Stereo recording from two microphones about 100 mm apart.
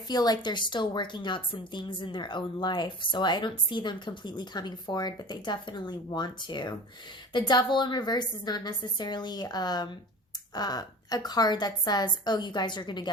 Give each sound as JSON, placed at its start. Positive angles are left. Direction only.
{"t": 0.1, "sound": "a woman's voice", "side_deg": 45}